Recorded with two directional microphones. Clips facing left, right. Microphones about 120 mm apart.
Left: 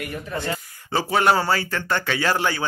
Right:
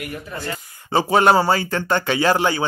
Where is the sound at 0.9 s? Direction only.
25° right (ahead or behind).